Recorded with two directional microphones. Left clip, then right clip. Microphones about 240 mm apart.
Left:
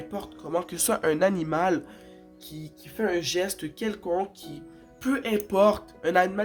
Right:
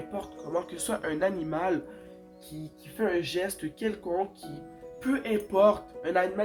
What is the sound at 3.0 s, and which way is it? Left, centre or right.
Speech, left.